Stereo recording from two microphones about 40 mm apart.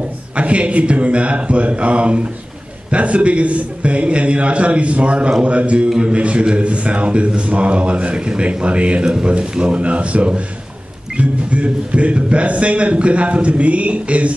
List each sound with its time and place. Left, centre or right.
0.4 s a man's voice: right
5.9 s a man's voice: centre
6.1 s a man's voice: right